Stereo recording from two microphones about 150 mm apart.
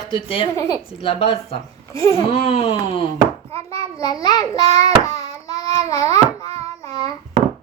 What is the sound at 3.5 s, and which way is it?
Hands, 40° right (ahead or behind).